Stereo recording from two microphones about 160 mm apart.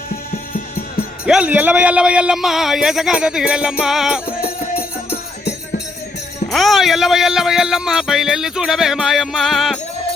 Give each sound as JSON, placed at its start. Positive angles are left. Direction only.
{"t": 0.5, "sound": "music", "side_deg": 65}
{"t": 1.2, "sound": "speech", "side_deg": -5}
{"t": 4.8, "sound": "music", "side_deg": 80}
{"t": 6.5, "sound": "speech", "side_deg": 0}